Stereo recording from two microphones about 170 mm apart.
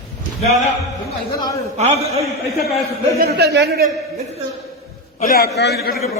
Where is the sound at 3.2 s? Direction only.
70° right (ahead or behind).